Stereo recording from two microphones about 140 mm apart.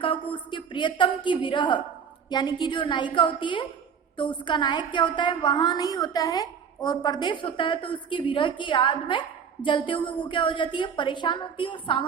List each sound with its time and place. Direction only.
0.0 s a woman's voice: 35° left (ahead or behind)